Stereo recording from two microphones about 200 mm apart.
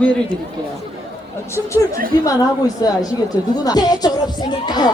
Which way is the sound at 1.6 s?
15° left (ahead or behind).